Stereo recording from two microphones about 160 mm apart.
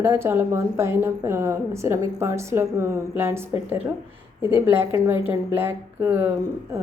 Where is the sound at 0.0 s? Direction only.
15° right (ahead or behind).